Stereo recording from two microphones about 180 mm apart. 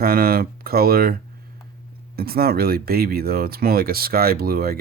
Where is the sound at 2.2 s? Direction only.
60° right (ahead or behind).